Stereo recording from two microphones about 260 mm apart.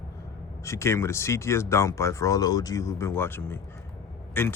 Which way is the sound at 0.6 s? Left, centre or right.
Centre.